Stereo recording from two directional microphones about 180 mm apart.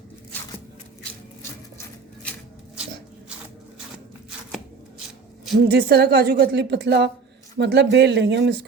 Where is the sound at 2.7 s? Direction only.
5° right (ahead or behind).